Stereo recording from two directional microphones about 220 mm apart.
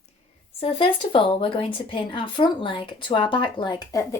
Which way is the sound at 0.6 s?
25° left (ahead or behind).